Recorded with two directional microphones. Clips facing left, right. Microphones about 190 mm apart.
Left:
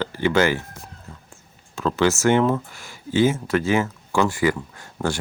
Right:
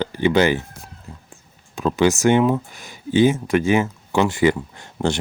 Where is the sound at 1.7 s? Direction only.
15° right (ahead or behind).